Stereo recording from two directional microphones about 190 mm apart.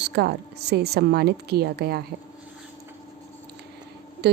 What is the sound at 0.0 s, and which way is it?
A woman's voice, 60° right (ahead or behind).